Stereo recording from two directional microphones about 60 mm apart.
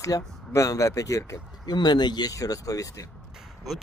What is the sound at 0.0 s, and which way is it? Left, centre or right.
Speech, left.